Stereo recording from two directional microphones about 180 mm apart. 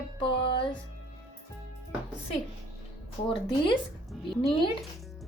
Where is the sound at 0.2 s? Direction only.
30° left (ahead or behind).